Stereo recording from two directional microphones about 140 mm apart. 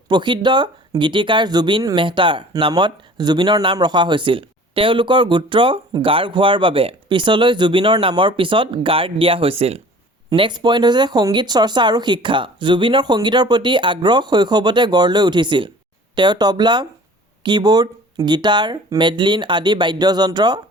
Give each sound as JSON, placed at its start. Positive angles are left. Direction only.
{"t": 0.1, "sound": "speech", "side_deg": -35}
{"t": 10.2, "sound": "speech", "side_deg": -35}